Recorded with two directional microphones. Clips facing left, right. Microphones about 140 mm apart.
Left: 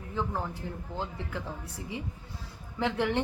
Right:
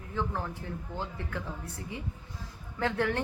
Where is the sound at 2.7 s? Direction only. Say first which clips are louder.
Left 1 dB; 20° left (ahead or behind).